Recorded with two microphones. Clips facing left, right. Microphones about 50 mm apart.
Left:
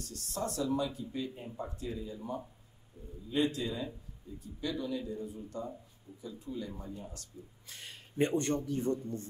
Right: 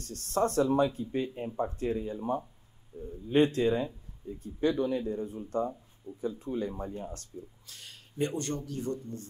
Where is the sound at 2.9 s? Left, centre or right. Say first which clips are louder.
Right 8 dB; right.